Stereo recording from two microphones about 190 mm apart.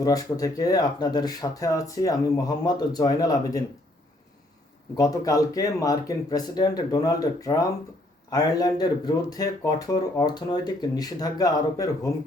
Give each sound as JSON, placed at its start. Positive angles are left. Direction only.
{"t": 0.0, "sound": "speech", "side_deg": 20}
{"t": 4.9, "sound": "speech", "side_deg": 20}